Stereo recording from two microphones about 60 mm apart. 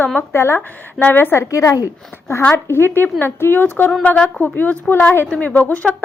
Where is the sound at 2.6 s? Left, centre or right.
Left.